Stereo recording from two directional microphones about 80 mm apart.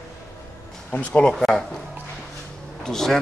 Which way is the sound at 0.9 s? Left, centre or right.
Centre.